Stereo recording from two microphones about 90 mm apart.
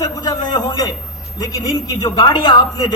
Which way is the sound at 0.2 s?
45° left (ahead or behind).